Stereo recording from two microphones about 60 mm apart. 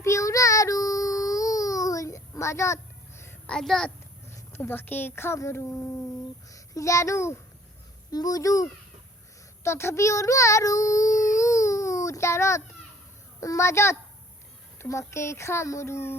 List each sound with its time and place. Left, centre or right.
0.0 s child singing: left
3.5 s a child's voice: centre
4.5 s speech: left
6.5 s a child's voice: left
8.1 s speech: left
9.6 s child singing: left
13.4 s speech: left